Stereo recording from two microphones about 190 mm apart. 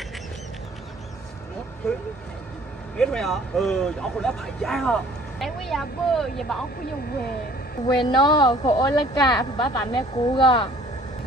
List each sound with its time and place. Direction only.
3.0 s speech: 5° left (ahead or behind)
7.9 s speech: 25° left (ahead or behind)